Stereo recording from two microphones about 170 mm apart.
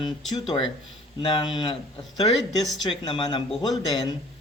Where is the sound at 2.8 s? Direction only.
30° left (ahead or behind).